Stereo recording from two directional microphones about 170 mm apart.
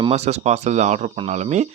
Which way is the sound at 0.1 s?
40° right (ahead or behind).